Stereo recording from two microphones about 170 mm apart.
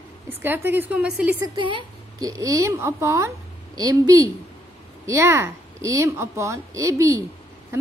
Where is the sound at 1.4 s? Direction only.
25° right (ahead or behind).